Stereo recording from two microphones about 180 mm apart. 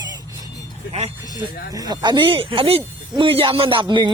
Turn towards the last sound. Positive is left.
turn(degrees=-25)  # may be behind; listen again after turning